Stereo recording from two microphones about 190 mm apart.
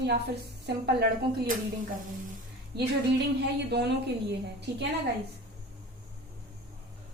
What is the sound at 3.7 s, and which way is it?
Speech, 65° right (ahead or behind).